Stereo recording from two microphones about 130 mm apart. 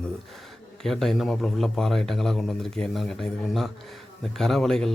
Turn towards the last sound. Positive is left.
turn(degrees=5)  # may be behind; listen again after turning